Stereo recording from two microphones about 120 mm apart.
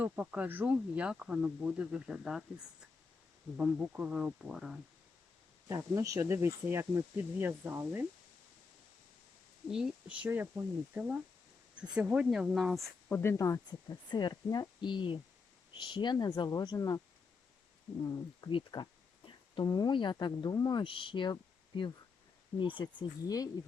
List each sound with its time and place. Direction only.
0.0 s speech: 15° right (ahead or behind)
5.6 s speech: 25° right (ahead or behind)
9.7 s speech: 10° right (ahead or behind)
13.1 s speech: 15° left (ahead or behind)
13.3 s speech: 30° left (ahead or behind)
18.3 s speech: 40° left (ahead or behind)
22.8 s speech: 35° left (ahead or behind)